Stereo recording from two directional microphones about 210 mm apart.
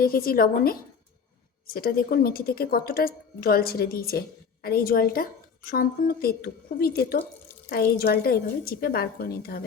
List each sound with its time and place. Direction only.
0.0 s a woman's voice: 45° left (ahead or behind)